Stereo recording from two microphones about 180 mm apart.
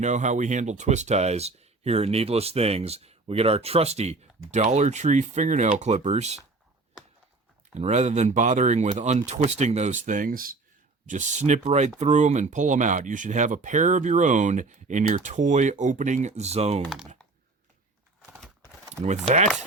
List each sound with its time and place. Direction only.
0.0 s speech: 40° right (ahead or behind)
7.7 s speech: 40° right (ahead or behind)